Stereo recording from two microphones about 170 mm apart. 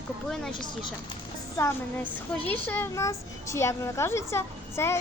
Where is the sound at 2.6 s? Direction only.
10° left (ahead or behind).